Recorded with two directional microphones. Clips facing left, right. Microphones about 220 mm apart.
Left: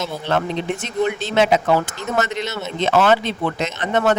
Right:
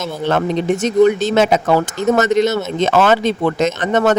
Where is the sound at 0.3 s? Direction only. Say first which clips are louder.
Right 6 dB; 45° right (ahead or behind).